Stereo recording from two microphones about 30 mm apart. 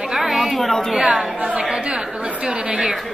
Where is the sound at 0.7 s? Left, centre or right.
Centre.